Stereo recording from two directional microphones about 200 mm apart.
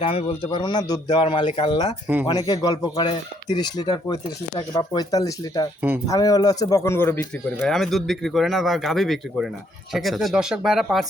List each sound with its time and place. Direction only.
0.0 s speech: 30° left (ahead or behind); by 7.2 s 10° left (ahead or behind)
7.6 s speech: centre (ahead or behind)